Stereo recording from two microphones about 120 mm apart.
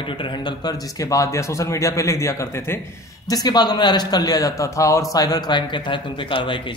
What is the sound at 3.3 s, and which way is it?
A man's voice, 35° left (ahead or behind).